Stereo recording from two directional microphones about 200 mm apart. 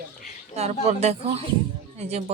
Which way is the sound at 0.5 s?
30° right (ahead or behind).